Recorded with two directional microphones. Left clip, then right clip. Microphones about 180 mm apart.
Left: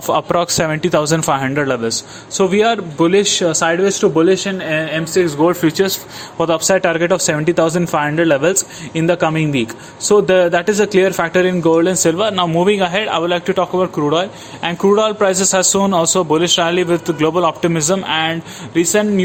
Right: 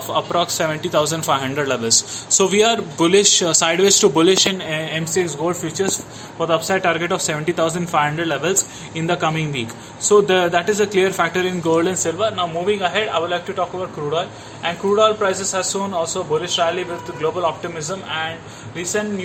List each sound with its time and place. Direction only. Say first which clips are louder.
0.1 s a man's voice: left 4 dB; 45° left (ahead or behind); by 4.5 s 10° left (ahead or behind)
4.7 s speech: left 5 dB; 25° left (ahead or behind)
5.4 s a man's voice: left 8 dB; 45° left (ahead or behind)
12.0 s a man's voice: left 5 dB; 60° left (ahead or behind)